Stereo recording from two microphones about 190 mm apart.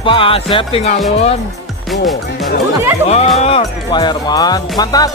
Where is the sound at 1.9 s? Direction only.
Centre (ahead or behind).